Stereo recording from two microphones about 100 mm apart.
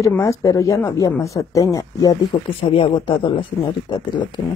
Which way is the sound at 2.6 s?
65° left (ahead or behind).